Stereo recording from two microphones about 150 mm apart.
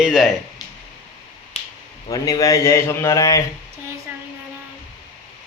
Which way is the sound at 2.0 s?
25° left (ahead or behind).